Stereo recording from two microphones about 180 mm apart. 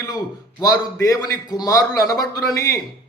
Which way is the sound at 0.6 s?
20° left (ahead or behind).